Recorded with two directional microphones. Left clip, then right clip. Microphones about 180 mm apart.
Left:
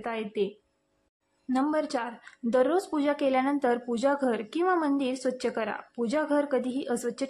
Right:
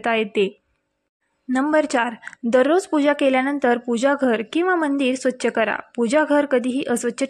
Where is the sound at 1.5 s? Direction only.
30° right (ahead or behind).